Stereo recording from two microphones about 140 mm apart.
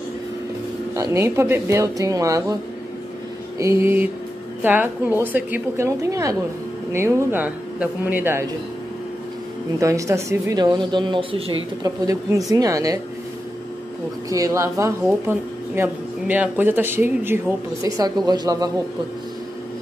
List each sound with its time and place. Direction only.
0.9 s speech: 20° right (ahead or behind)
3.5 s speech: 20° right (ahead or behind)
9.8 s speech: 20° right (ahead or behind); by 11.5 s 40° right (ahead or behind)
11.8 s speech: 25° right (ahead or behind)
14.3 s speech: 25° right (ahead or behind)
17.8 s speech: 25° right (ahead or behind)